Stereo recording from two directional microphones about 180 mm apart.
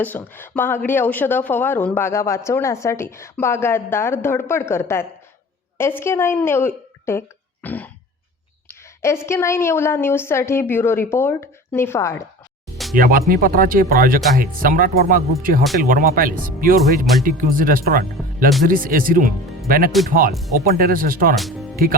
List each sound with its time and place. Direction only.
0.0 s a woman's voice: 10° left (ahead or behind)
9.0 s speech: 15° left (ahead or behind)
12.7 s music: centre (ahead or behind)
13.0 s speech: 55° right (ahead or behind)
21.3 s speech: centre (ahead or behind)